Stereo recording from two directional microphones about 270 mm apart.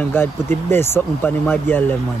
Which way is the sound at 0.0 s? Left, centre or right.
Centre.